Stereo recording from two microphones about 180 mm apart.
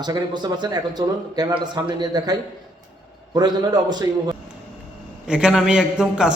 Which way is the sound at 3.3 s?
20° right (ahead or behind).